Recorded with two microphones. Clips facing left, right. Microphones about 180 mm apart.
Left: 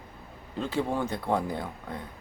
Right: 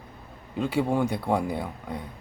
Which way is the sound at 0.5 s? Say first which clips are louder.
Right 4 dB; 10° right (ahead or behind).